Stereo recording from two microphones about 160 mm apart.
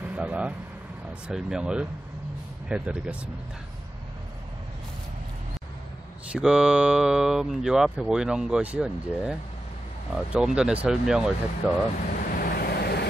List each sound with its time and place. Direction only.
0.0 s speech: 10° right (ahead or behind)
6.3 s speech: 5° right (ahead or behind)
12.1 s vehicle: 60° left (ahead or behind); by 13.0 s 80° left